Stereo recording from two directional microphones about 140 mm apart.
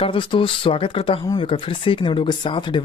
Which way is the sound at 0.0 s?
40° left (ahead or behind).